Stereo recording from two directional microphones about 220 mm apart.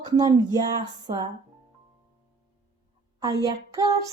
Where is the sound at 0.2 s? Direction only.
15° right (ahead or behind).